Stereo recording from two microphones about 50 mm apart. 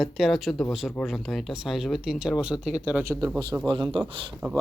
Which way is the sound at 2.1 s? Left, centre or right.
Centre.